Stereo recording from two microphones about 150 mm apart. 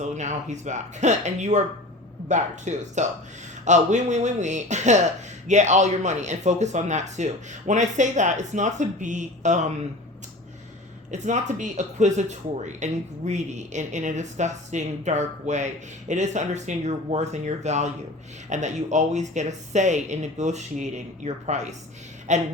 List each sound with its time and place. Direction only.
0.0 s speech: 50° right (ahead or behind)
11.1 s speech: 55° right (ahead or behind)